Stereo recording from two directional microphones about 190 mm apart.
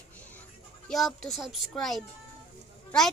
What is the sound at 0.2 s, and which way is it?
Music, 10° left (ahead or behind).